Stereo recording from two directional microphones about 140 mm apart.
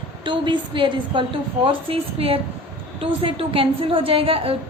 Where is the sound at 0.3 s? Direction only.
35° right (ahead or behind).